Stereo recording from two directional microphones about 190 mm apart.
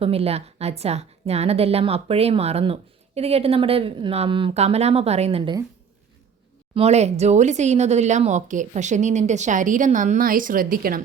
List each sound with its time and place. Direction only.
0.0 s speech: 30° right (ahead or behind)
6.7 s speech: 35° right (ahead or behind)